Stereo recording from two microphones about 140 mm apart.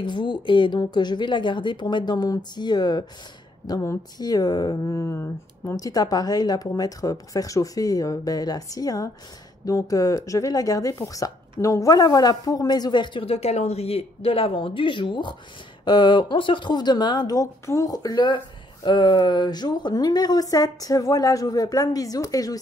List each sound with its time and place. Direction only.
0.0 s speech: 35° left (ahead or behind)